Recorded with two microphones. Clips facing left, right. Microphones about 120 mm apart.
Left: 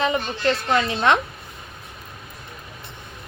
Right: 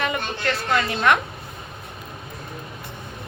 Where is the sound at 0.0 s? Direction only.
25° left (ahead or behind).